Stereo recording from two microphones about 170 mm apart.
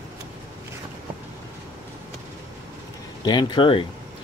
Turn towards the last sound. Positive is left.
turn(degrees=30)  # may be behind; listen again after turning